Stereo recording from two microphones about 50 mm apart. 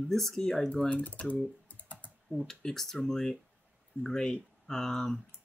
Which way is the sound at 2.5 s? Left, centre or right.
Centre.